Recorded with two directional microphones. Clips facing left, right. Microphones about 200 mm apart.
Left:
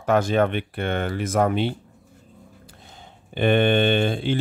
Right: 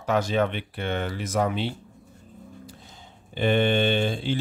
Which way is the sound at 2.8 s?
60° left (ahead or behind).